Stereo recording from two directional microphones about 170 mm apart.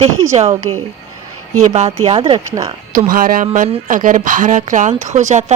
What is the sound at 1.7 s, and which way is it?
Speech, 35° right (ahead or behind).